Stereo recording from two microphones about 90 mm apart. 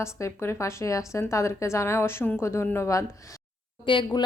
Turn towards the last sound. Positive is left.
turn(degrees=70)  # may be behind; listen again after turning